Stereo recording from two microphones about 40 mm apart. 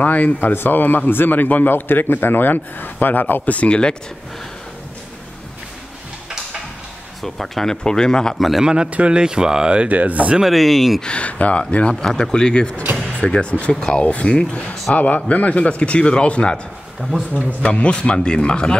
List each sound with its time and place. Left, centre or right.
0.0 s speech: left
0.4 s a man's voice: left
3.5 s speech: left
7.2 s speech: centre
7.7 s speech: centre
8.4 s speech: centre
8.9 s speech: right
9.8 s speech: right
10.4 s speech: centre
11.0 s speech: left
13.7 s speech: centre
14.5 s speech: left
17.6 s speech: left